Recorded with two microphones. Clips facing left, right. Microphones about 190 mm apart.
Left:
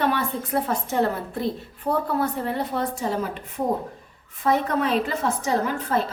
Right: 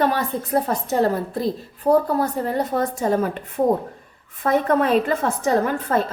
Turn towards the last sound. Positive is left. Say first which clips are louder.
# right 4 dB
turn(degrees=-50)  # may be behind; listen again after turning